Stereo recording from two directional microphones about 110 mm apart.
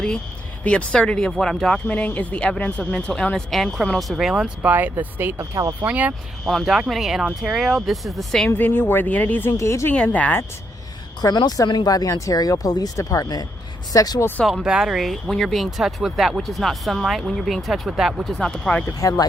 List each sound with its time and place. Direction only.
0.6 s speech: 10° left (ahead or behind); by 5.4 s 20° right (ahead or behind)
5.4 s speech: 30° right (ahead or behind)
5.8 s speech: 15° right (ahead or behind)
6.4 s speech: centre (ahead or behind)
8.4 s speech: 15° left (ahead or behind)
9.5 s speech: 25° left (ahead or behind)
9.9 s speech: 15° left (ahead or behind)
11.2 s speech: 40° left (ahead or behind)
14.4 s speech: 5° right (ahead or behind)
18.9 s speech: 30° left (ahead or behind)